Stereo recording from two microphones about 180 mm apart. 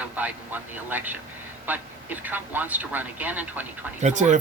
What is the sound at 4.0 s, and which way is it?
Speech, 40° right (ahead or behind).